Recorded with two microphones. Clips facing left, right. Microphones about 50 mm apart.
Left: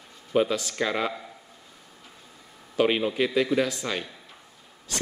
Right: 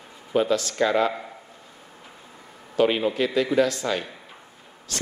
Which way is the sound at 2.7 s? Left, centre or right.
Centre.